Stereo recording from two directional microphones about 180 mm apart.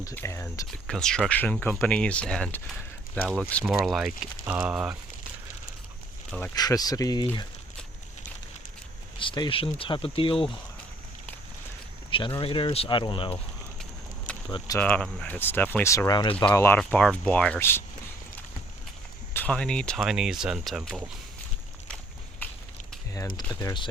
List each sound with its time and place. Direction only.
0.0 s speech: 15° left (ahead or behind)
0.7 s speech: 5° left (ahead or behind)
6.5 s speech: 20° left (ahead or behind)
9.1 s speech: 25° left (ahead or behind)
12.1 s speech: 25° left (ahead or behind)
14.8 s speech: 5° left (ahead or behind)
16.5 s speech: 10° left (ahead or behind)
19.3 s speech: 10° left (ahead or behind)
22.4 s a sound: 10° left (ahead or behind)
23.5 s speech: 20° left (ahead or behind)